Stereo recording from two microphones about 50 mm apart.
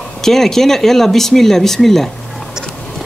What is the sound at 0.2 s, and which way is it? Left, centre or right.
Speech, centre.